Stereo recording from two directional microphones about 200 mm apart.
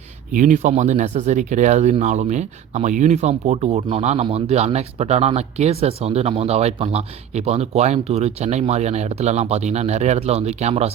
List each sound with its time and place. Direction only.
0.3 s speech: 40° right (ahead or behind)